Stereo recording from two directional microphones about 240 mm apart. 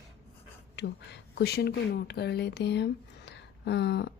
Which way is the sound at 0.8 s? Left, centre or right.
Left.